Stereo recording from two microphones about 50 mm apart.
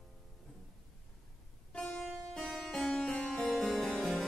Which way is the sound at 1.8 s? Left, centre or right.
Left.